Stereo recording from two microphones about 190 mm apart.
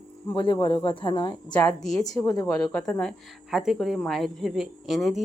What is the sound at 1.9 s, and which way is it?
Speech, 20° left (ahead or behind).